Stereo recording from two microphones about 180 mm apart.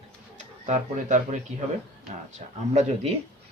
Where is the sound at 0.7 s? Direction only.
40° right (ahead or behind).